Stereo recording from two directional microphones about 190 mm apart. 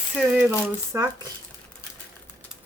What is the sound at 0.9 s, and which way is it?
Speech, 15° right (ahead or behind).